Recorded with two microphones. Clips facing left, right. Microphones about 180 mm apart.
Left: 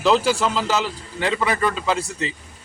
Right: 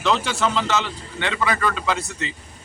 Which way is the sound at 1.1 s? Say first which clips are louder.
Left 4 dB; 35° left (ahead or behind).